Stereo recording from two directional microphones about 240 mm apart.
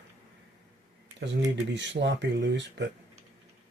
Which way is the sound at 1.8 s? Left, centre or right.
Right.